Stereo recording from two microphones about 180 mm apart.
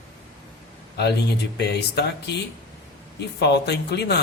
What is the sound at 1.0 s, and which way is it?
Speech, 65° left (ahead or behind).